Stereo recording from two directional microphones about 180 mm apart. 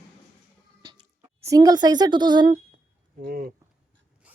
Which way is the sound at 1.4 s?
20° right (ahead or behind).